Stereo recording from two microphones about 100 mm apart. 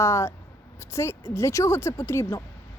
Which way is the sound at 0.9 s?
30° left (ahead or behind).